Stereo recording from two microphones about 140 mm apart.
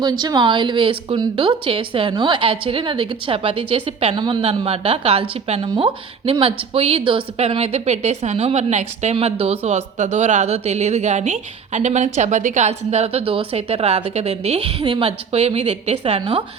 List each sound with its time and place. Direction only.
0.0 s a woman's voice: 30° right (ahead or behind); by 9.1 s 55° right (ahead or behind)
9.1 s speech: 45° right (ahead or behind)